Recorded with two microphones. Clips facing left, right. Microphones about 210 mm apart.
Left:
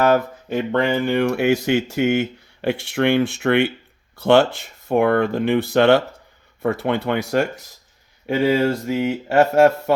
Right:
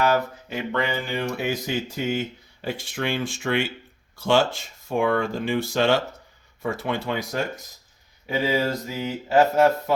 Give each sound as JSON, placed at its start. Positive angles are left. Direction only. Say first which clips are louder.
{"t": 0.0, "sound": "speech", "louder": "left 5 dB", "side_deg": 50}